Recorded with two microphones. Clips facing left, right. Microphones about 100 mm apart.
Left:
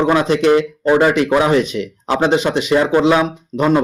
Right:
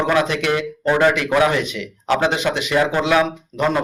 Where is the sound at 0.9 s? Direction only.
10° left (ahead or behind).